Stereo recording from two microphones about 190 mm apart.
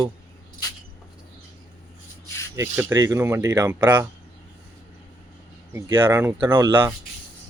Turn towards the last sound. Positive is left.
turn(degrees=-15)  # may be behind; listen again after turning